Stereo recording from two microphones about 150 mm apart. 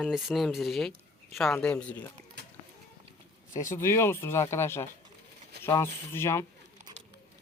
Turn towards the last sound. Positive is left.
turn(degrees=15)  # may be behind; listen again after turning